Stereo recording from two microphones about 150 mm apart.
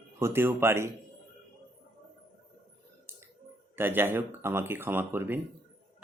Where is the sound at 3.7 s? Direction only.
15° right (ahead or behind).